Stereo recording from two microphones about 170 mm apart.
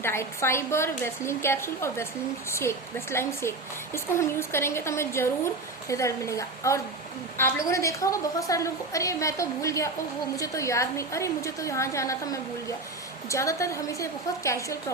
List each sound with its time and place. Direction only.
0.0 s a woman's voice: 15° left (ahead or behind)